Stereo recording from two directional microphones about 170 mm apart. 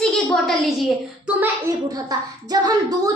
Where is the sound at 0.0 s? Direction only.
5° left (ahead or behind).